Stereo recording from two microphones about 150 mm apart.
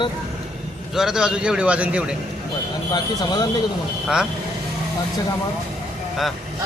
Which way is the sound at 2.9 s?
25° left (ahead or behind).